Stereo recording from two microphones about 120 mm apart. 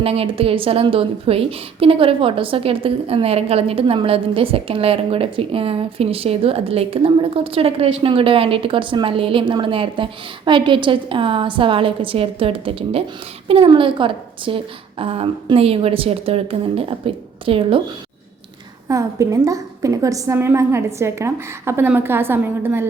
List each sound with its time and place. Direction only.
0.0 s a woman's voice: 50° right (ahead or behind)
18.9 s a woman's voice: 25° right (ahead or behind)